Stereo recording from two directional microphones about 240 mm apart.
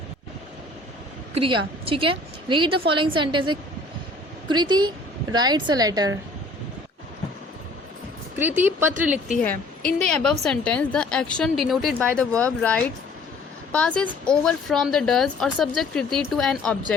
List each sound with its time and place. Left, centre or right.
1.3 s a woman's voice: right
8.4 s speech: centre
10.1 s speech: centre